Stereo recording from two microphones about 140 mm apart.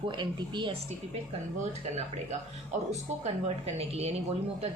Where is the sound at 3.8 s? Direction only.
50° right (ahead or behind).